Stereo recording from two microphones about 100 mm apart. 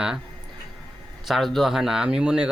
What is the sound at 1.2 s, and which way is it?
Speech, centre (ahead or behind).